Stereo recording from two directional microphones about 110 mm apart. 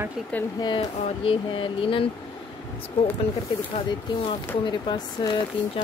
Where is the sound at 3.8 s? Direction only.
45° left (ahead or behind).